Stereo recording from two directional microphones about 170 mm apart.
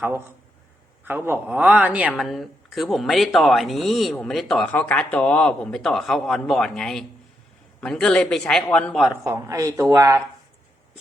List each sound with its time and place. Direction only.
1.0 s a man's voice: 15° right (ahead or behind)
9.2 s speech: 20° right (ahead or behind)